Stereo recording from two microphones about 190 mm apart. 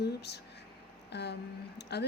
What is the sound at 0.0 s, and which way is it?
Speech, 60° left (ahead or behind).